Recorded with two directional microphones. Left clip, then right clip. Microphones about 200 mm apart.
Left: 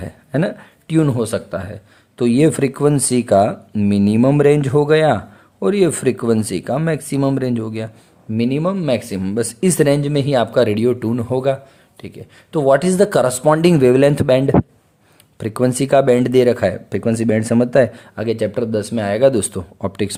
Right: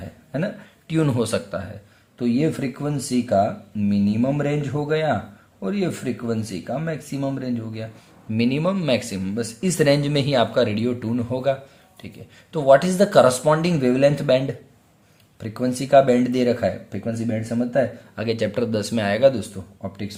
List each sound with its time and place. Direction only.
0.3 s speech: 40° left (ahead or behind)
8.3 s speech: 30° left (ahead or behind)
18.2 s speech: 30° left (ahead or behind)
19.3 s speech: 50° left (ahead or behind)